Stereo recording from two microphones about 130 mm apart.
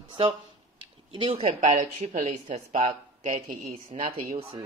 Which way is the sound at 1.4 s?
70° right (ahead or behind).